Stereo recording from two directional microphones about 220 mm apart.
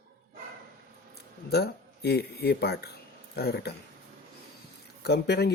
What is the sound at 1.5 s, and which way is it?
Speech, 50° left (ahead or behind).